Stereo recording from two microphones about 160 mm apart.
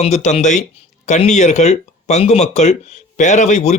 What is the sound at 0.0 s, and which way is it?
Speech, 45° left (ahead or behind).